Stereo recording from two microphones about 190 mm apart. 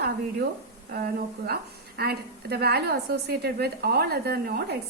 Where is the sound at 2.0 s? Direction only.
55° right (ahead or behind).